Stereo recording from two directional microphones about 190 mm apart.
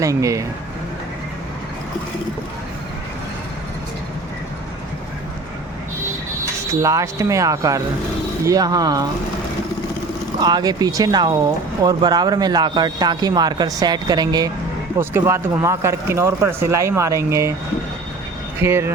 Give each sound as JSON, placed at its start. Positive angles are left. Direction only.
{"t": 0.0, "sound": "speech", "side_deg": -15}
{"t": 6.8, "sound": "speech", "side_deg": -15}
{"t": 10.4, "sound": "speech", "side_deg": -20}
{"t": 18.6, "sound": "speech", "side_deg": -15}